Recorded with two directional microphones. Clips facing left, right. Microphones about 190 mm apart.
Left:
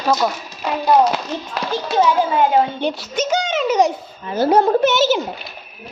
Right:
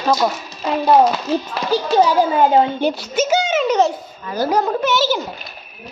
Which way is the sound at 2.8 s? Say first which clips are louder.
Right 3 dB; 5° right (ahead or behind).